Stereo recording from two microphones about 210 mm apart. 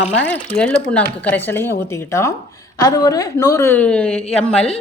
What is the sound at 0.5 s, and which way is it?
Speech, 5° left (ahead or behind).